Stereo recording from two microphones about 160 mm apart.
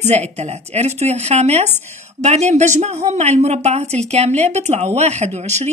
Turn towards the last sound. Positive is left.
turn(degrees=-45)  # may be behind; listen again after turning